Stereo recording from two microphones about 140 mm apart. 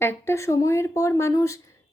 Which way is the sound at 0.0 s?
15° left (ahead or behind).